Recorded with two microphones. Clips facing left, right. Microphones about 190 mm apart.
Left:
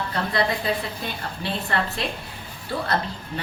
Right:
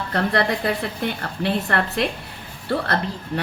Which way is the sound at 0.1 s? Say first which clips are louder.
Right 5 dB; 60° right (ahead or behind).